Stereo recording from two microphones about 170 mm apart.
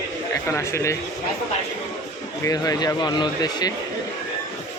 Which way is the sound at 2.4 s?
20° left (ahead or behind).